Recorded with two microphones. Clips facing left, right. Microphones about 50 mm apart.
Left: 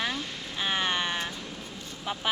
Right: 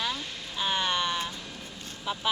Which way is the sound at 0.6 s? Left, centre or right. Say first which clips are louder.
Even; left.